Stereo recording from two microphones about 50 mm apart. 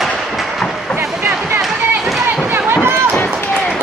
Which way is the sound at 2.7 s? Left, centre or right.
Right.